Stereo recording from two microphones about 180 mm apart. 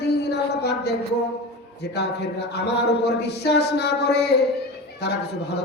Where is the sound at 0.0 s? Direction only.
70° left (ahead or behind).